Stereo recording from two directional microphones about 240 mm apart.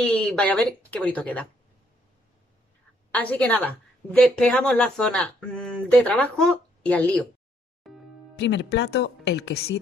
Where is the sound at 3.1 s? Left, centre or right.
Centre.